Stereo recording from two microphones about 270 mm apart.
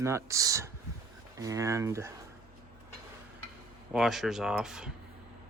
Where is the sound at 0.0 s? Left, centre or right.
Centre.